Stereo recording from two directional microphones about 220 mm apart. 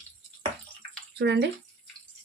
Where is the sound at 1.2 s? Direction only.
50° right (ahead or behind).